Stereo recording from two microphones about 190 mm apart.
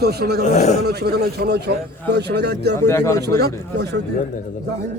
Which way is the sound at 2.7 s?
15° left (ahead or behind).